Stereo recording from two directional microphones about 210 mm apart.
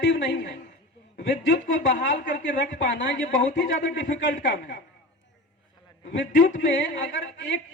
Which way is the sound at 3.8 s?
60° left (ahead or behind).